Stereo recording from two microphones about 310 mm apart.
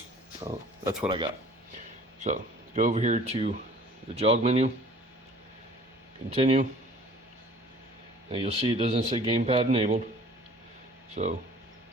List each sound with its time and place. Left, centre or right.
0.4 s speech: centre
6.3 s speech: right
8.3 s speech: centre
11.1 s speech: right